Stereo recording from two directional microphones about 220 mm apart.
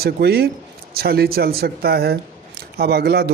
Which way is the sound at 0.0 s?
45° right (ahead or behind).